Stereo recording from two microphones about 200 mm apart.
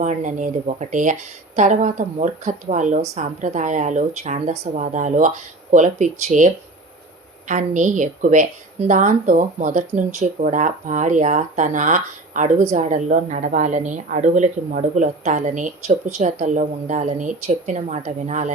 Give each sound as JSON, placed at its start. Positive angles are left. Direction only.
{"t": 0.0, "sound": "a woman's voice", "side_deg": -40}